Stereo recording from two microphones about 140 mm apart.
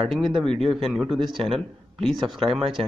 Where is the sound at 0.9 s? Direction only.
Centre (ahead or behind).